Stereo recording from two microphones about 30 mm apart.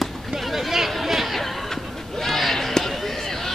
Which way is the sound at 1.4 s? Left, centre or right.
Centre.